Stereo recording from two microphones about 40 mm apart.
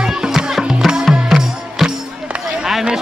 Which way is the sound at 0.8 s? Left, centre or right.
Centre.